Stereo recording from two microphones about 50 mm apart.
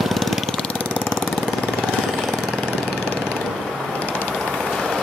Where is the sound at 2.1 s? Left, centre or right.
Centre.